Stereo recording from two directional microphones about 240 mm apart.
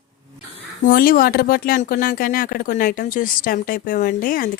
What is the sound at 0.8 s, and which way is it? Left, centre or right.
Speech, left.